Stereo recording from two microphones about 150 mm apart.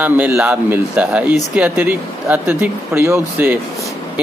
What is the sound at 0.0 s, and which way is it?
Speech, 10° right (ahead or behind).